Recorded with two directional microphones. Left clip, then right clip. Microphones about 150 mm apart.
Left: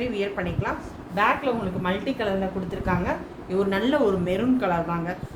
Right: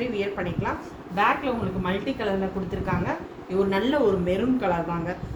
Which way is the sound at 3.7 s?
40° left (ahead or behind).